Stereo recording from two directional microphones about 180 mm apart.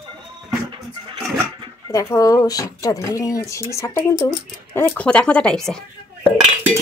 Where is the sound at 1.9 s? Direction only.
15° left (ahead or behind).